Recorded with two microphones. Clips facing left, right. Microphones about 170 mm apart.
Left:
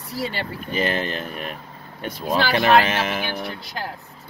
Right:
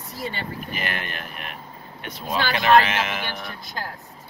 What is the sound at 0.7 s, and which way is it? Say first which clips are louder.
Speech: left 11 dB; 30° left (ahead or behind).